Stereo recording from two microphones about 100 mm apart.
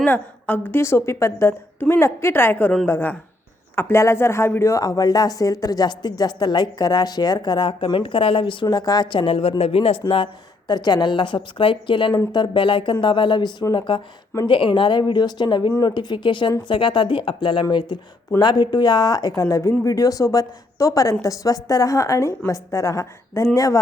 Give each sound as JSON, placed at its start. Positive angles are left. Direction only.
{"t": 0.0, "sound": "a woman's voice", "side_deg": 15}
{"t": 8.6, "sound": "a woman's voice", "side_deg": 40}
{"t": 10.7, "sound": "a woman's voice", "side_deg": 45}